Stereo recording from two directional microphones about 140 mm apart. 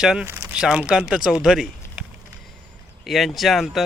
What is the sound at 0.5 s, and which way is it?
Speech, 5° right (ahead or behind).